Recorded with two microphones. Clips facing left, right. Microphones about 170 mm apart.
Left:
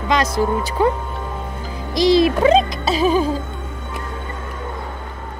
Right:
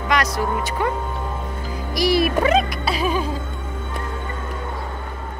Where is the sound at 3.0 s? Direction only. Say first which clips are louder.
Left 7 dB; 30° left (ahead or behind).